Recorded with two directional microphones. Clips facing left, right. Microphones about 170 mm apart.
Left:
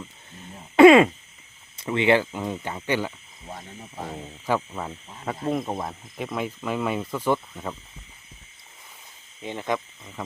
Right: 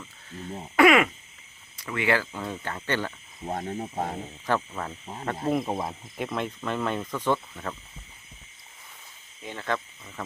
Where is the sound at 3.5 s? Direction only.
50° right (ahead or behind).